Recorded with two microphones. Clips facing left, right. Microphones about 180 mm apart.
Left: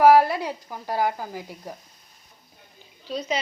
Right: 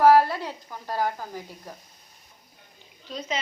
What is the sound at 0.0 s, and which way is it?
Speech, 15° left (ahead or behind).